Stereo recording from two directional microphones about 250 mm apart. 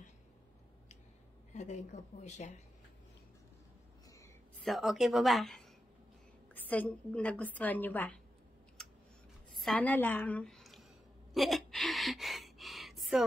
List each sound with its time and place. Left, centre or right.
1.5 s speech: left
4.6 s a woman's voice: centre
9.6 s a woman's voice: centre
11.3 s a sound: centre